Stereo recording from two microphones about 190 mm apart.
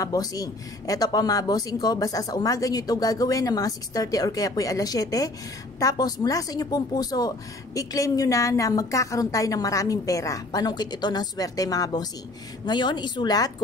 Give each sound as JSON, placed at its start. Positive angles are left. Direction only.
{"t": 0.0, "sound": "speech", "side_deg": 20}